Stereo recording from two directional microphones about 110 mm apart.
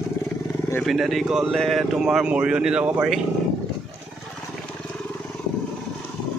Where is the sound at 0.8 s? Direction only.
Centre (ahead or behind).